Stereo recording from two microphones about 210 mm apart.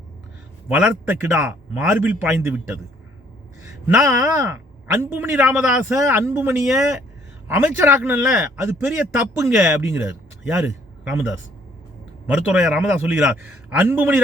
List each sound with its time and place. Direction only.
0.7 s a man's voice: 10° right (ahead or behind)
3.8 s a man's voice: 10° right (ahead or behind)
12.3 s a man's voice: 5° right (ahead or behind)